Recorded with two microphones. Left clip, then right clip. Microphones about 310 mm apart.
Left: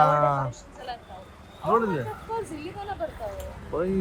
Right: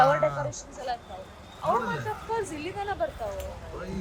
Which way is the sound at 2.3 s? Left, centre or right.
Right.